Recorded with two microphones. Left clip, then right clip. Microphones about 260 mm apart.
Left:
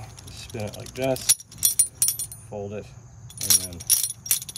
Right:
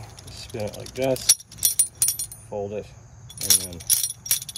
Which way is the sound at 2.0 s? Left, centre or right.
Centre.